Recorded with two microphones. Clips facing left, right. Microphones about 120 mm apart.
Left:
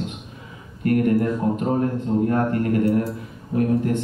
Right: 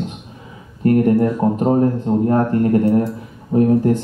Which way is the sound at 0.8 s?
35° right (ahead or behind).